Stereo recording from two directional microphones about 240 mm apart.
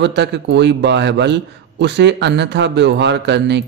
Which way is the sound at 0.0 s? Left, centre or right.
Right.